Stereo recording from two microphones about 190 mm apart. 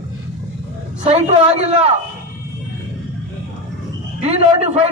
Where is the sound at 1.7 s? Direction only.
35° right (ahead or behind).